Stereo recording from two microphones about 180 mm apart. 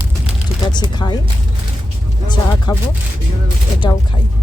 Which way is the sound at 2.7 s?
25° left (ahead or behind).